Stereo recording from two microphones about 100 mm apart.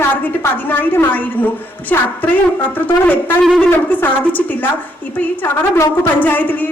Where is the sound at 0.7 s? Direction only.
20° left (ahead or behind).